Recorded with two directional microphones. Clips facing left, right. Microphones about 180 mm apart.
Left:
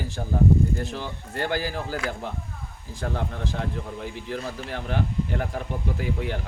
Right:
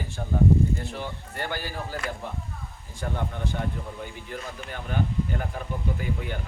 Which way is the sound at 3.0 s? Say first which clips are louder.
Left 1 dB; 90° left.